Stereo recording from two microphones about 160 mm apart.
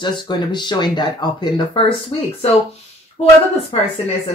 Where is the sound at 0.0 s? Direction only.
30° left (ahead or behind).